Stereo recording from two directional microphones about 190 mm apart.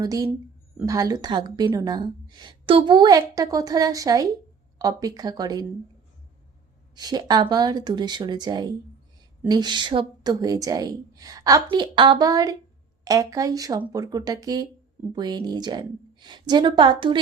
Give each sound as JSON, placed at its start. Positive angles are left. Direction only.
{"t": 0.0, "sound": "speech", "side_deg": -20}
{"t": 6.9, "sound": "speech", "side_deg": -20}